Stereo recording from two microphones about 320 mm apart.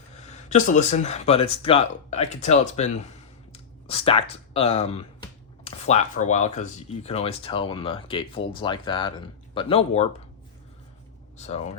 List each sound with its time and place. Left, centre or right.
0.2 s speech: left
11.3 s speech: left